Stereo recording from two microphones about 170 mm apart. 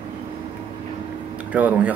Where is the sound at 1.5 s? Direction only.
10° right (ahead or behind).